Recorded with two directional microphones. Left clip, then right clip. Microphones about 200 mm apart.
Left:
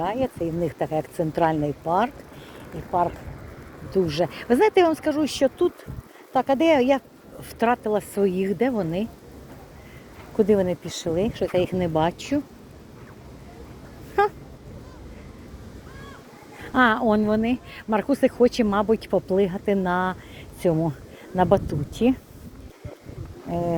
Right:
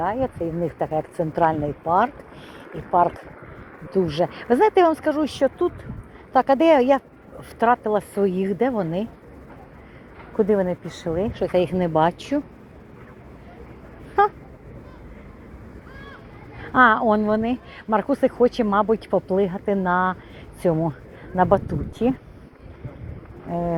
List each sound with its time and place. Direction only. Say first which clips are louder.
0.0 s speech: right 1 dB; 25° left (ahead or behind)
3.8 s speech: right 1 dB; 15° left (ahead or behind)
6.3 s speech: right 3 dB; 10° left (ahead or behind)
10.8 s speech: even; 30° left (ahead or behind)
11.3 s speech: right 2 dB; 15° left (ahead or behind)
14.2 s speech: right 3 dB; 25° left (ahead or behind)
16.7 s speech: right 4 dB; 25° left (ahead or behind)